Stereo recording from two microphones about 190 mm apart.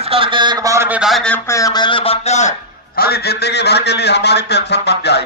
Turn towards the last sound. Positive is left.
turn(degrees=60)  # may be behind; listen again after turning